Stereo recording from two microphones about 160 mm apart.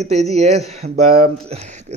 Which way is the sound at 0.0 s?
45° right (ahead or behind).